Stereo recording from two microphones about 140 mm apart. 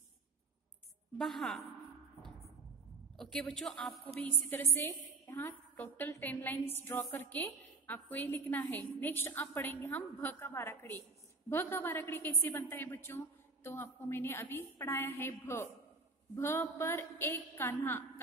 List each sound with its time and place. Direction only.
1.1 s a woman's voice: centre (ahead or behind)
3.2 s a woman's voice: 5° left (ahead or behind)
4.2 s a woman's voice: 15° left (ahead or behind)